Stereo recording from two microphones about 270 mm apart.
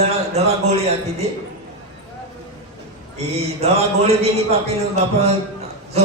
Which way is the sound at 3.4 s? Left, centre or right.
Right.